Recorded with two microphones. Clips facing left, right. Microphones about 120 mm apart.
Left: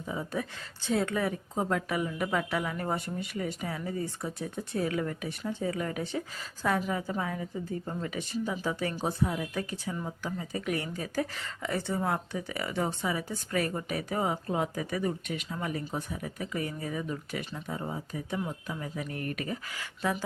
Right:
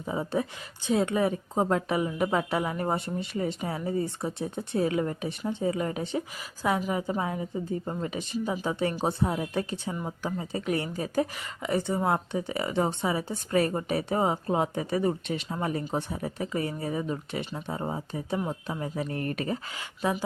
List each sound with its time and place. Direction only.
0.1 s speech: 30° right (ahead or behind)
19.7 s speech: 20° right (ahead or behind)